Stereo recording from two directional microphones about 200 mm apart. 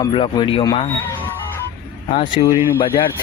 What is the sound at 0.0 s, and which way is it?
Speech, 25° left (ahead or behind).